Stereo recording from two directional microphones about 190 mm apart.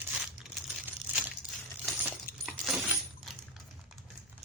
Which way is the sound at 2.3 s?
50° left (ahead or behind).